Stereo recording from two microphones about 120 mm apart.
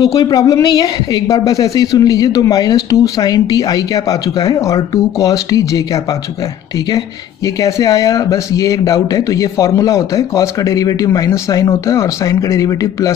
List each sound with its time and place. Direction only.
0.0 s speech: 35° left (ahead or behind)
7.4 s speech: 30° left (ahead or behind)